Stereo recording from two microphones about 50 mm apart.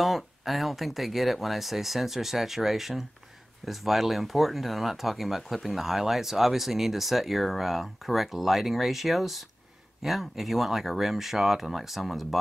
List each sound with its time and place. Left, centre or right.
0.0 s speech: centre